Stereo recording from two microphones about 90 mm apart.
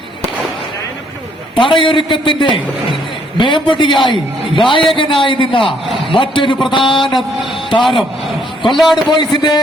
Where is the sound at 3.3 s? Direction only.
65° left (ahead or behind).